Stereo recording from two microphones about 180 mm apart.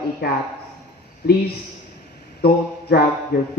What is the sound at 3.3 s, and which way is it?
Speech, 65° left (ahead or behind).